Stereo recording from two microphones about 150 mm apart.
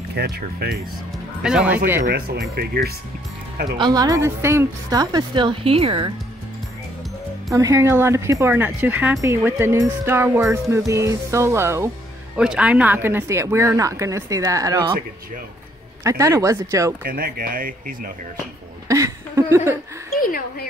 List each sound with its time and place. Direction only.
0.1 s speech: 90° right
1.4 s speech: 5° right (ahead or behind)
2.0 s speech: 90° right
3.7 s speech: 30° right (ahead or behind)
7.5 s speech: 20° right (ahead or behind)
12.4 s speech: 5° right (ahead or behind); by 15.0 s 25° right (ahead or behind)
16.0 s speech: 20° right (ahead or behind)
17.0 s speech: 85° right; by 18.1 s 70° right (ahead or behind)
18.9 s a sound: 20° right (ahead or behind)
20.2 s speech: 70° left (ahead or behind)